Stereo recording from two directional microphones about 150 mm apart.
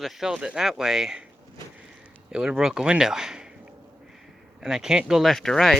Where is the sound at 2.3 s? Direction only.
5° right (ahead or behind).